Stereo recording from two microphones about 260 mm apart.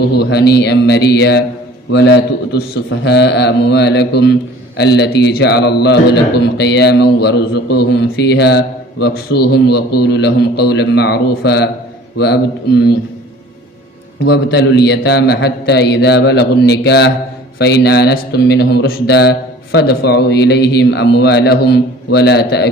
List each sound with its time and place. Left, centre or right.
0.0 s a man's voice: left
14.3 s a man's voice: left